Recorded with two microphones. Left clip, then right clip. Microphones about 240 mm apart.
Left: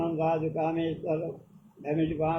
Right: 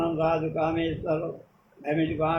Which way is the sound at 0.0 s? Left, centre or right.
Right.